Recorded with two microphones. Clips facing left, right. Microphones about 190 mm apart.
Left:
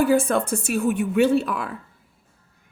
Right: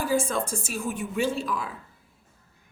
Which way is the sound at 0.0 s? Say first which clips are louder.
Left 7 dB; 65° left (ahead or behind).